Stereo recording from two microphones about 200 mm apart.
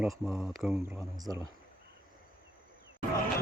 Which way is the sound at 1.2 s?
20° right (ahead or behind).